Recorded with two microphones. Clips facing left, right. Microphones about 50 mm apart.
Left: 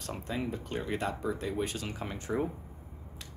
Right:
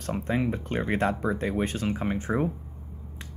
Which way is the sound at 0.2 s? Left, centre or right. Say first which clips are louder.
Right 7 dB; right.